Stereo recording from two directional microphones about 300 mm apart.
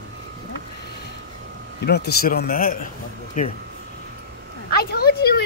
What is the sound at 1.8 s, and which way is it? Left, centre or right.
A man's voice, left.